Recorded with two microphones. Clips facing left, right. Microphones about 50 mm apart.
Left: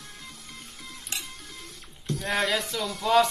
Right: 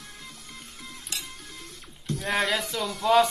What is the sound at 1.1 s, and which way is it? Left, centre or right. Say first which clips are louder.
Music: left 1 dB; left.